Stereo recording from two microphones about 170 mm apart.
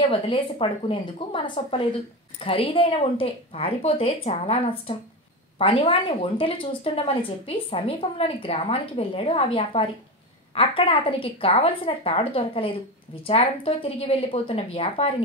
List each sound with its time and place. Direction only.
0.1 s a woman's voice: 30° left (ahead or behind)